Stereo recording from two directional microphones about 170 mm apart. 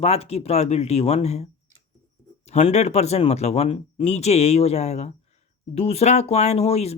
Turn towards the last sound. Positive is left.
turn(degrees=40)  # may be behind; listen again after turning